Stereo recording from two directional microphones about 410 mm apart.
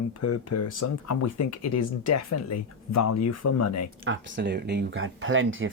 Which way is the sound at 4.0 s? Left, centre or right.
Right.